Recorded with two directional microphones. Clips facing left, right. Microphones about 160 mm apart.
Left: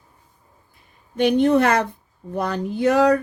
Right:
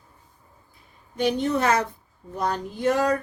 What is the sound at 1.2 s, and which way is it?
Speech, 60° left (ahead or behind).